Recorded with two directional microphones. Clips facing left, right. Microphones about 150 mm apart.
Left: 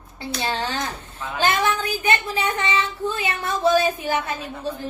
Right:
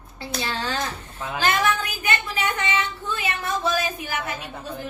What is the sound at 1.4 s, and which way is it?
A woman's voice, 25° left (ahead or behind).